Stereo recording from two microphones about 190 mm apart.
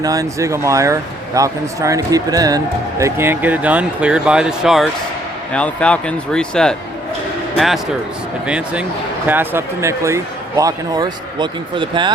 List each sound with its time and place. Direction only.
0.0 s speech: 20° right (ahead or behind); by 6.7 s 5° left (ahead or behind)
8.4 s speech: 5° right (ahead or behind); by 12.1 s 25° right (ahead or behind)